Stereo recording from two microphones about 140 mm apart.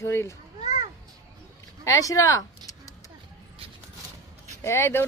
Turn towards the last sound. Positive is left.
turn(degrees=15)  # may be behind; listen again after turning